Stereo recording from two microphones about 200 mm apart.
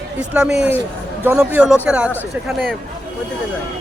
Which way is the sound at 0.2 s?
5° right (ahead or behind).